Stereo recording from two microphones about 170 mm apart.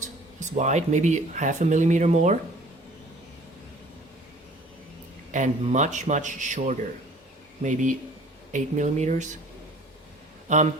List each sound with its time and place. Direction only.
0.3 s speech: 45° right (ahead or behind)
5.3 s speech: 45° right (ahead or behind)